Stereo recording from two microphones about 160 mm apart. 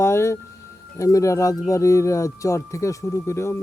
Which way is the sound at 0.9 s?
20° left (ahead or behind).